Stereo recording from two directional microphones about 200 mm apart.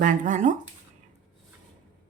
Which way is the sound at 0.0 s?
40° right (ahead or behind).